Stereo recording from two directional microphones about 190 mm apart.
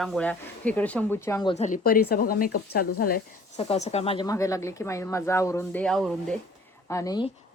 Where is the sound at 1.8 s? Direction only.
55° left (ahead or behind).